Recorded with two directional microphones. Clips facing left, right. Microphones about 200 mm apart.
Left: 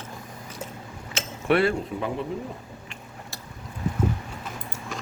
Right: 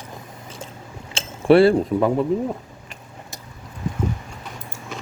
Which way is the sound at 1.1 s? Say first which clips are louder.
Right 9 dB; 30° right (ahead or behind).